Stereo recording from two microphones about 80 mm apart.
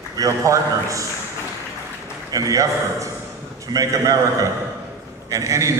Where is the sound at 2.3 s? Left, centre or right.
Right.